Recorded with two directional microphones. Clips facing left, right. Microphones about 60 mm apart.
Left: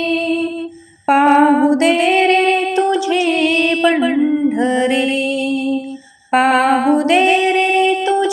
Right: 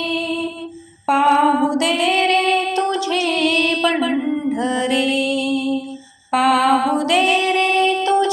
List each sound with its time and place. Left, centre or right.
0.1 s music: left
1.0 s a sound: left
6.3 s female singing: left; by 8.3 s centre